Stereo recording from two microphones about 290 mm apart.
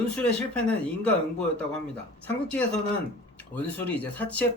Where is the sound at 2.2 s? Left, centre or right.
Centre.